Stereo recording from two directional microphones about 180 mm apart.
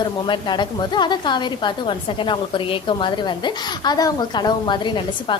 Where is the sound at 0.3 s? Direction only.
25° left (ahead or behind).